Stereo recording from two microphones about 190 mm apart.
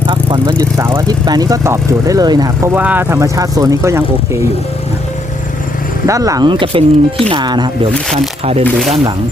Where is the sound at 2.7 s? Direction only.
10° right (ahead or behind).